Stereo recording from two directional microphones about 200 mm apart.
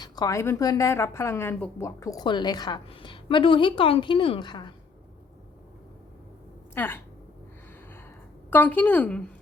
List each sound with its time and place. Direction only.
0.0 s a woman's voice: 15° left (ahead or behind)
6.7 s a woman's voice: 10° left (ahead or behind)
8.4 s a woman's voice: 10° left (ahead or behind)